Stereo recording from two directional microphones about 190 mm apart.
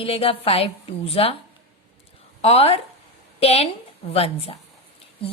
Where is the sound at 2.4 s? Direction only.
30° left (ahead or behind).